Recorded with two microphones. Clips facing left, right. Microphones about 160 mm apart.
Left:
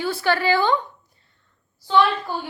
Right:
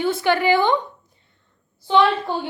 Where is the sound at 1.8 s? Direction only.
25° right (ahead or behind).